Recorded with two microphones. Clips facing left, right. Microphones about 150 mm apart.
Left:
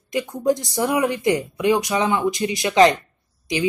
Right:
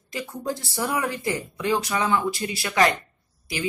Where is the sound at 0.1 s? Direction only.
20° left (ahead or behind).